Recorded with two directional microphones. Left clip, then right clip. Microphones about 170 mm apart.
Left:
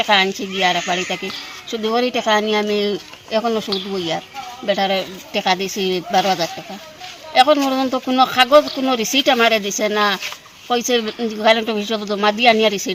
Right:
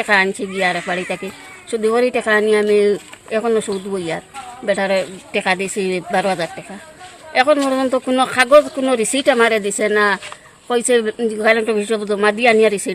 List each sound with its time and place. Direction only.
0.0 s speech: 30° right (ahead or behind)